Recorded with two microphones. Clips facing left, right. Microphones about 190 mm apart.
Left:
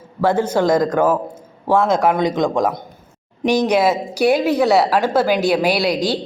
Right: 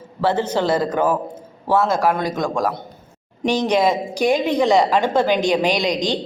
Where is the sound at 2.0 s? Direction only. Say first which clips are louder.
Left 3 dB; 20° left (ahead or behind).